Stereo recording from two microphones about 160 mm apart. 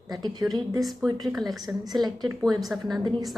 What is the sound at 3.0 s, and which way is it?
Speech, 30° right (ahead or behind).